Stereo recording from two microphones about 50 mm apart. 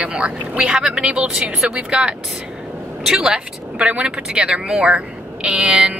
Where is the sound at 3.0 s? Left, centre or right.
Centre.